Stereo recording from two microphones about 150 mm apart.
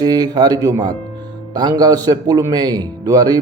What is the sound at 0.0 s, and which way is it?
A man's voice, 25° right (ahead or behind).